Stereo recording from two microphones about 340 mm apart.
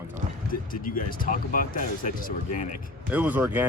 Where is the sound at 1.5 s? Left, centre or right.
Left.